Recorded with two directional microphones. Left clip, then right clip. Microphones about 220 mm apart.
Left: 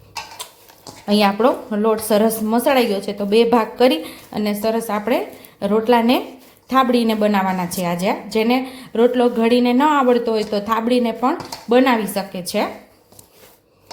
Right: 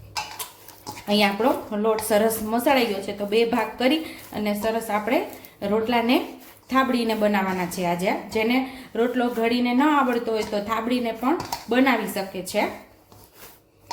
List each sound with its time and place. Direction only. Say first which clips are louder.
1.0 s a woman's voice: left 5 dB; 25° left (ahead or behind)